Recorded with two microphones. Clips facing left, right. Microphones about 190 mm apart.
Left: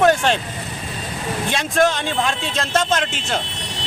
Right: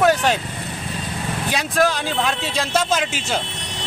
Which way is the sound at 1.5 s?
Centre (ahead or behind).